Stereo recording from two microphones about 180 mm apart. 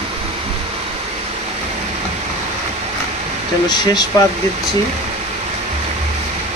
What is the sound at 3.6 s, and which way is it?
Speech, 25° left (ahead or behind).